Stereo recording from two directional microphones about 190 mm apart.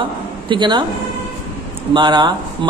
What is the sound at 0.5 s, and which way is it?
Speech, 25° right (ahead or behind).